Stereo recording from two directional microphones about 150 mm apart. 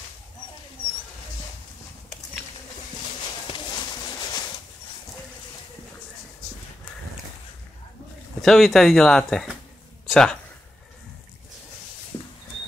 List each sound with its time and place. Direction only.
3.4 s horse: 30° left (ahead or behind)
8.4 s speech: centre (ahead or behind)
10.0 s a sound: 5° left (ahead or behind)
12.1 s rodents: 25° left (ahead or behind)